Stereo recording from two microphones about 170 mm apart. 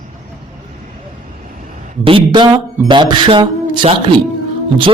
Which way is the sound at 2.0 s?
30° right (ahead or behind).